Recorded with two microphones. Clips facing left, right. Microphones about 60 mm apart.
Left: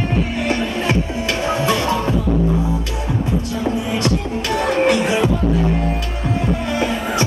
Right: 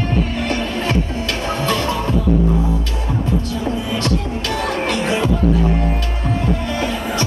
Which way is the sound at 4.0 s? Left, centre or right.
Centre.